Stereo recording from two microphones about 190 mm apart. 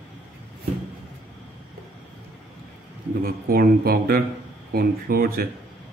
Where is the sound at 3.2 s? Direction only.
50° right (ahead or behind).